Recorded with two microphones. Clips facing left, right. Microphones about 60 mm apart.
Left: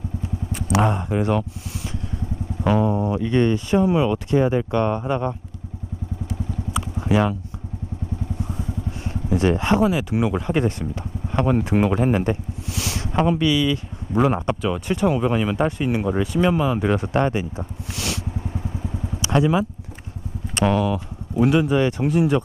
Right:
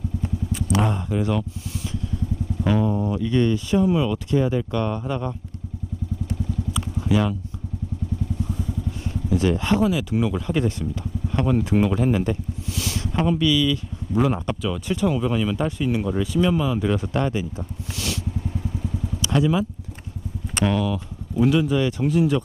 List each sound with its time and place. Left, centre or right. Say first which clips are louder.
0.8 s speech: left 4 dB; left
2.6 s speech: left 3 dB; left
7.1 s speech: left 2 dB; left
9.0 s speech: left 2 dB; left
14.1 s speech: left 2 dB; left
17.9 s vehicle: left 1 dB; left
18.5 s vehicle: even; left
19.3 s speech: left 2 dB; left
20.7 s speech: left 3 dB; left